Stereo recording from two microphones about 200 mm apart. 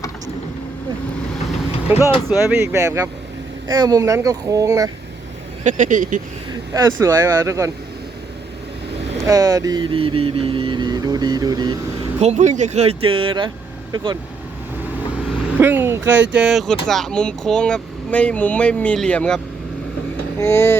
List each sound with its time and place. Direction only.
1.5 s vehicle: 10° right (ahead or behind)
2.5 s speech: 15° right (ahead or behind)
5.6 s speech: 40° right (ahead or behind)
6.7 s speech: 15° right (ahead or behind)
9.2 s vehicle: 15° right (ahead or behind)
12.2 s speech: 35° right (ahead or behind)
13.0 s vehicle: 25° right (ahead or behind)
15.6 s speech: 10° right (ahead or behind); by 19.4 s 5° left (ahead or behind)
20.4 s speech: 10° left (ahead or behind)